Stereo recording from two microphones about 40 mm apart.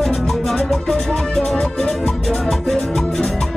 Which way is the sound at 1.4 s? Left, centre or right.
Left.